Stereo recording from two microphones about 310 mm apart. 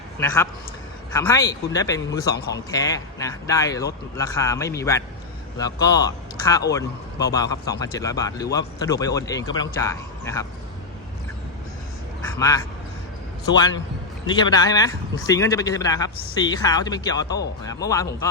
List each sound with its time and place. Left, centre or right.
1.1 s speech: centre
12.4 s speech: centre